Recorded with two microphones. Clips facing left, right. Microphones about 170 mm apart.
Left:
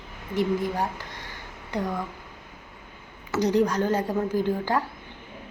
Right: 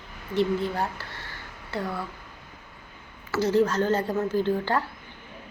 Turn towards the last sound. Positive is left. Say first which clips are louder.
# even
turn(degrees=10)  # may be behind; listen again after turning